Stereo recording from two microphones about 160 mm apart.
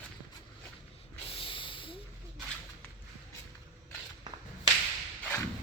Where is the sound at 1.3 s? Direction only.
35° left (ahead or behind).